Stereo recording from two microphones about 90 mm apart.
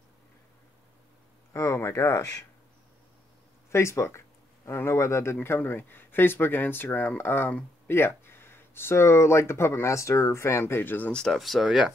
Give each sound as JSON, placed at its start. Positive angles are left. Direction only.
{"t": 1.5, "sound": "speech", "side_deg": 30}
{"t": 3.7, "sound": "speech", "side_deg": 30}
{"t": 11.1, "sound": "speech", "side_deg": 0}